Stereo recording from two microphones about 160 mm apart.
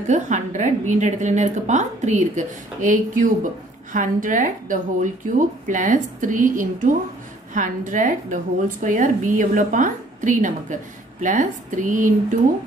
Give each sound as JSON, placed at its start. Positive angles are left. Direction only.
{"t": 0.0, "sound": "a woman's voice", "side_deg": -50}